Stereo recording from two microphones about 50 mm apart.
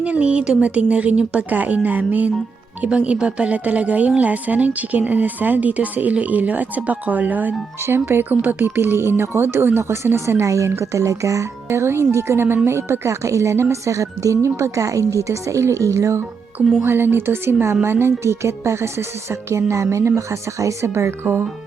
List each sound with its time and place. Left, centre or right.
0.0 s a woman's voice: right
7.9 s speech: right
8.3 s speech: right
10.0 s speech: right
10.4 s speech: right
10.7 s speech: right
16.8 s speech: right
18.2 s speech: right